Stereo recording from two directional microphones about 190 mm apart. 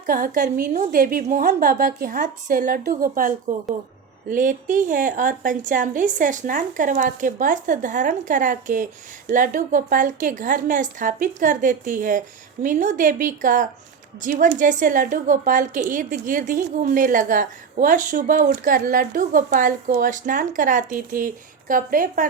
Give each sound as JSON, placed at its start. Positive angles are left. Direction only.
{"t": 0.0, "sound": "a woman's voice", "side_deg": -45}